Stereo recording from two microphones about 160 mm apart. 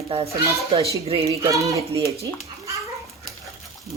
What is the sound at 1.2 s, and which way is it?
Speech, 20° right (ahead or behind).